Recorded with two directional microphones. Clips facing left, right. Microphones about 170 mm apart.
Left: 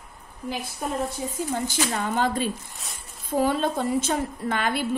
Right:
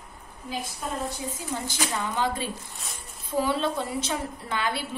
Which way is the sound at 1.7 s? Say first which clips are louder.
Left 4 dB; 50° left (ahead or behind).